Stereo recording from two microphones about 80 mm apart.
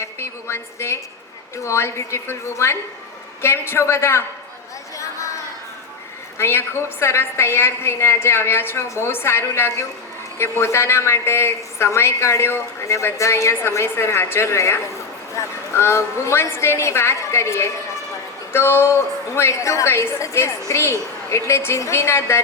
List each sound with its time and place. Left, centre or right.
0.0 s a sound: left
1.6 s a woman's voice: left
6.4 s a woman's voice: left